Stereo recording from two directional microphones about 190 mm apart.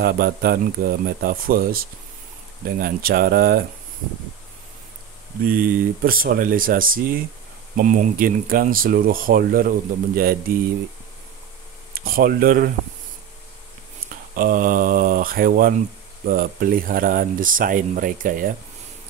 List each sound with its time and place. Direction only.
0.0 s speech: 55° right (ahead or behind)
5.4 s speech: 50° right (ahead or behind)
11.9 s speech: 50° right (ahead or behind)
14.3 s speech: 45° right (ahead or behind)